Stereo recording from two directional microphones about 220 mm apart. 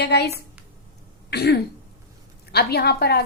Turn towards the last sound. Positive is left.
turn(degrees=45)  # may be behind; listen again after turning